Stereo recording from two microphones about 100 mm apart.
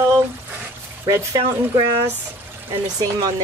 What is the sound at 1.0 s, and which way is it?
Speech, 40° right (ahead or behind).